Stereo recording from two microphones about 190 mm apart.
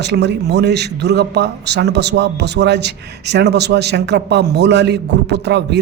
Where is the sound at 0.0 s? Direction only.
65° right (ahead or behind).